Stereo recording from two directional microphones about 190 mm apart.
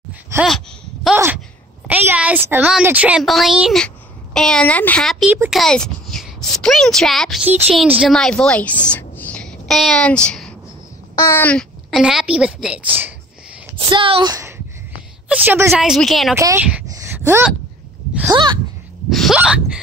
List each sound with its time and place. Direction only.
1.0 s a sound: 10° right (ahead or behind)
1.9 s speech: 10° right (ahead or behind)
5.3 s a child's voice: 10° right (ahead or behind)
5.6 s a child's voice: 5° left (ahead or behind)
12.0 s a woman's voice: 5° right (ahead or behind)
13.7 s a woman's voice: 25° right (ahead or behind)
15.2 s a woman's voice: 10° right (ahead or behind)
15.7 s a woman's voice: centre (ahead or behind)
16.3 s a child's voice: 15° right (ahead or behind)
16.9 s a sound: 15° right (ahead or behind)
18.3 s a woman's voice: 25° right (ahead or behind)
19.0 s hiccup: centre (ahead or behind)